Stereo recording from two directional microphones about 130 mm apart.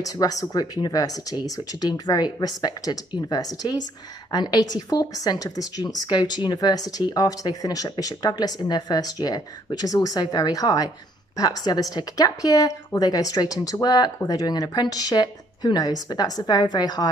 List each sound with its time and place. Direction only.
0.0 s a woman's voice: 30° left (ahead or behind)